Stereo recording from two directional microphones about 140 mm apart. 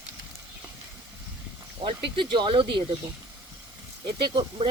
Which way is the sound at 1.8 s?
40° right (ahead or behind).